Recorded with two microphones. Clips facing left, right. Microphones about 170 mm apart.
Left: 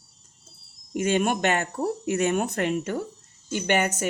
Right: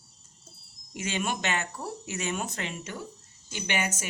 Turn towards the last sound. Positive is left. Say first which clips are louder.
# left 8 dB
turn(degrees=55)  # may be behind; listen again after turning